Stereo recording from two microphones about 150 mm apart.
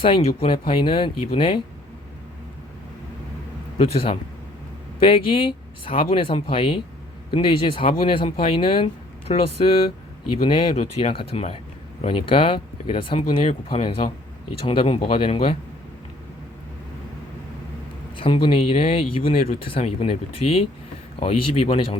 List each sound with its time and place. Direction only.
0.0 s speech: 35° left (ahead or behind)
3.8 s speech: 40° left (ahead or behind)
10.4 s speech: 35° left (ahead or behind)
18.2 s speech: 35° left (ahead or behind)